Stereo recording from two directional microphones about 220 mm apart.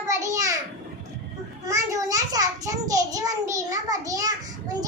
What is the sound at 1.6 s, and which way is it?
A child's voice, 15° right (ahead or behind).